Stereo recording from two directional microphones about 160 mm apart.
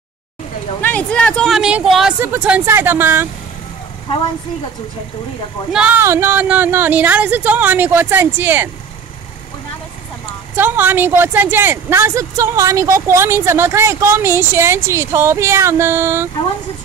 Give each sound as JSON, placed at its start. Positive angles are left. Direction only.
{"t": 0.8, "sound": "speech", "side_deg": 10}
{"t": 5.7, "sound": "speech", "side_deg": -5}
{"t": 10.5, "sound": "speech", "side_deg": -10}